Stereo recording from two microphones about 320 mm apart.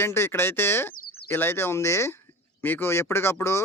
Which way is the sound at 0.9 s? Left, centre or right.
Left.